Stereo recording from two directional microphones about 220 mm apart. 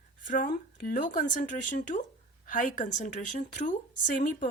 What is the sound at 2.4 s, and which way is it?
Speech, 40° left (ahead or behind).